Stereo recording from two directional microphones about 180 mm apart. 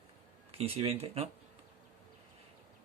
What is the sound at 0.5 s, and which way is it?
Speech, 35° right (ahead or behind).